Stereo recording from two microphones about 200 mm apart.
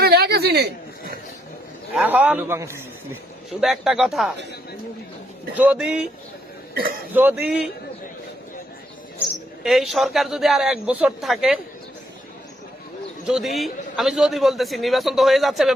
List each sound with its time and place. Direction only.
0.0 s a sound: 50° right (ahead or behind)
2.0 s a man's voice: 5° right (ahead or behind)
3.6 s a man's voice: centre (ahead or behind)
5.5 s a man's voice: 5° right (ahead or behind)
7.1 s a man's voice: 10° right (ahead or behind)
9.6 s a man's voice: centre (ahead or behind)
13.2 s a man's voice: centre (ahead or behind)